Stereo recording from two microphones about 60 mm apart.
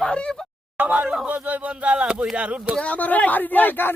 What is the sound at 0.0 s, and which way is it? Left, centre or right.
Speech, centre.